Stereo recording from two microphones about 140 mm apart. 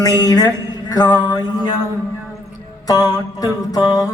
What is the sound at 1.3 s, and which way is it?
Mantra, 30° left (ahead or behind).